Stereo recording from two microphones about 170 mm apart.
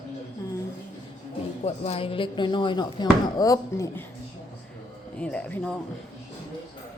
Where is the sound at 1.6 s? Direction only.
35° left (ahead or behind); by 3.9 s 20° left (ahead or behind).